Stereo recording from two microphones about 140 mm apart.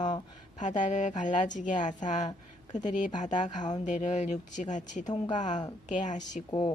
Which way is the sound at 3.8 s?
60° left (ahead or behind).